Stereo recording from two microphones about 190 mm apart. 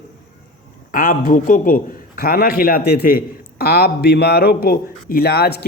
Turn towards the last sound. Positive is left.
turn(degrees=55)  # may be behind; listen again after turning